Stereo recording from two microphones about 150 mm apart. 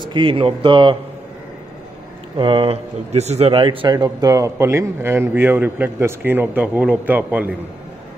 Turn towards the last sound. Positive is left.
turn(degrees=-10)  # may be behind; listen again after turning